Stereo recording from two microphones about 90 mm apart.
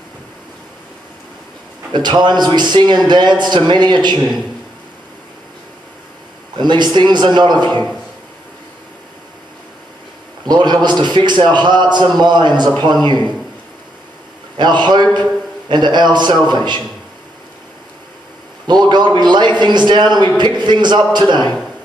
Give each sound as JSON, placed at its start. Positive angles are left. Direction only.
{"t": 1.9, "sound": "a man's voice", "side_deg": -55}
{"t": 6.6, "sound": "a man's voice", "side_deg": -55}
{"t": 10.4, "sound": "a man's voice", "side_deg": -50}
{"t": 14.6, "sound": "a man's voice", "side_deg": -55}
{"t": 18.7, "sound": "a man's voice", "side_deg": -55}